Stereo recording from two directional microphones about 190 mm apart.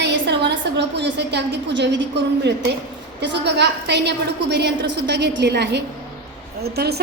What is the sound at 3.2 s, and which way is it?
A woman's voice, 65° right (ahead or behind).